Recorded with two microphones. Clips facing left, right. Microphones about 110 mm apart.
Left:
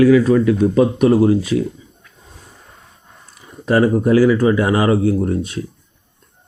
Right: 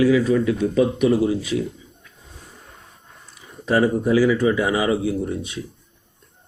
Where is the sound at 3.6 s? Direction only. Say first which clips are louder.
Left 4 dB; 50° left (ahead or behind).